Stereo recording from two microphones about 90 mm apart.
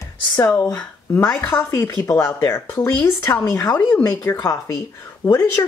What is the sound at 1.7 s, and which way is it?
Speech, 35° left (ahead or behind).